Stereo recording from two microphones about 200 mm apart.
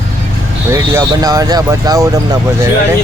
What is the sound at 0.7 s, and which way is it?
Speech, 15° right (ahead or behind).